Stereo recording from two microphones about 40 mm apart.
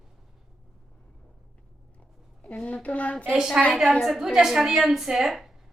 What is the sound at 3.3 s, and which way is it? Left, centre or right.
A woman's voice, centre.